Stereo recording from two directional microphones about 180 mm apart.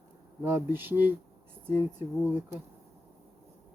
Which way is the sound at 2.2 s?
10° right (ahead or behind).